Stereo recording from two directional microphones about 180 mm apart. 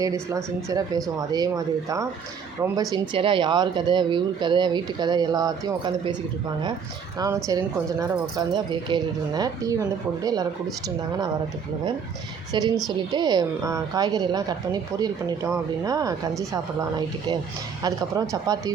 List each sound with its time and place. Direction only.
0.0 s speech: 20° right (ahead or behind)
7.2 s speech: 15° right (ahead or behind)
12.5 s speech: 20° right (ahead or behind)
17.8 s speech: 20° right (ahead or behind)